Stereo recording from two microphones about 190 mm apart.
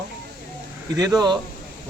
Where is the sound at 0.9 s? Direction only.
20° right (ahead or behind).